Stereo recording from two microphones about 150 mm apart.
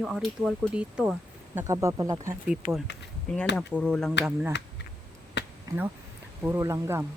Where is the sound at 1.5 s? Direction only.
20° right (ahead or behind).